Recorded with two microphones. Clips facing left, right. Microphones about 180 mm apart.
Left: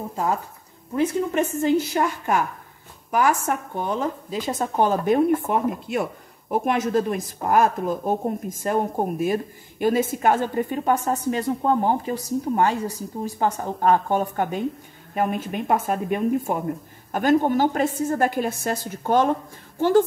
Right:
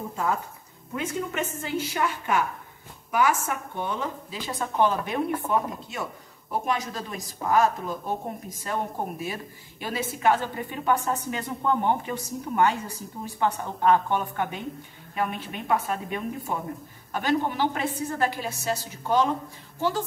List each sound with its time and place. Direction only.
0.1 s speech: 40° left (ahead or behind)
1.6 s a woman's voice: 45° left (ahead or behind)